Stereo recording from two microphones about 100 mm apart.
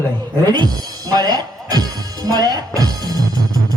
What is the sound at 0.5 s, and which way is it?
Speech, 40° right (ahead or behind).